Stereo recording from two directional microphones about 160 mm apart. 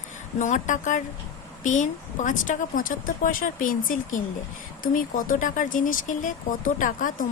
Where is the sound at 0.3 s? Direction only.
50° left (ahead or behind).